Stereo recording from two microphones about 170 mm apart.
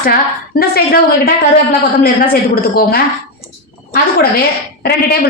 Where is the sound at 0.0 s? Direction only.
55° left (ahead or behind).